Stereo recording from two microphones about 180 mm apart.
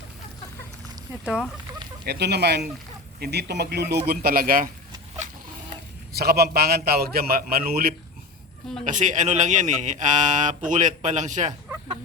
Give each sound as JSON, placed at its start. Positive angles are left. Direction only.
{"t": 1.2, "sound": "speech", "side_deg": -5}
{"t": 2.0, "sound": "a man's voice", "side_deg": -65}
{"t": 6.1, "sound": "a man's voice", "side_deg": -60}
{"t": 8.8, "sound": "speech", "side_deg": -45}